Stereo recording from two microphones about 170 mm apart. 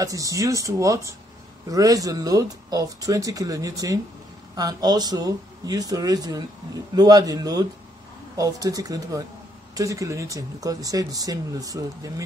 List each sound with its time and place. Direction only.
0.0 s speech: 20° right (ahead or behind)